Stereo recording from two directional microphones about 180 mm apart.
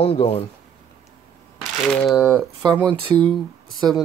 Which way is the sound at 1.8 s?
Centre (ahead or behind).